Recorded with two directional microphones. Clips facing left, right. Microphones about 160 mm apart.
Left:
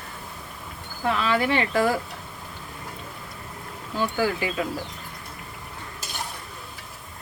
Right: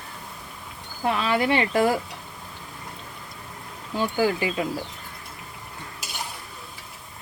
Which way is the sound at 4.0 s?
15° right (ahead or behind).